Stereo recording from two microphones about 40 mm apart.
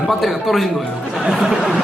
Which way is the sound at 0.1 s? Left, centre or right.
Centre.